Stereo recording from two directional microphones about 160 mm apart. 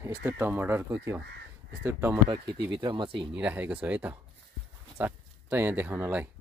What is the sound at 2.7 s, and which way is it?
Speech, 30° right (ahead or behind).